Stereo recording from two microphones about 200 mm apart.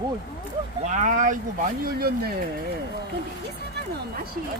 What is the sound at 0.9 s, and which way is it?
Speech, 40° right (ahead or behind).